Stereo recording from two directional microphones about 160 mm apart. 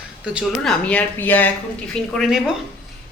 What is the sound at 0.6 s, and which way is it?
Speech, 10° left (ahead or behind).